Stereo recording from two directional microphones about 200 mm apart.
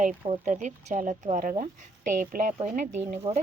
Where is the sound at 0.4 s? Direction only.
35° right (ahead or behind).